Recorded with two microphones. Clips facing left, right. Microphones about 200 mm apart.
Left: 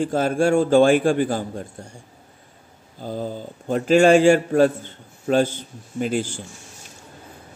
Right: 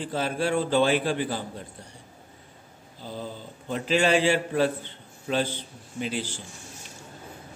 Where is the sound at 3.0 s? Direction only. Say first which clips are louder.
Left 8 dB; 45° left (ahead or behind).